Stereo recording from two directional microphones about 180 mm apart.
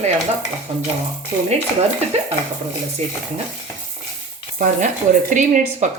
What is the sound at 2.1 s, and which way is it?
Speech, 35° right (ahead or behind).